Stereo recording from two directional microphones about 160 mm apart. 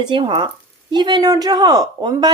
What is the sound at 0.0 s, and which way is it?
A woman's voice, 30° right (ahead or behind).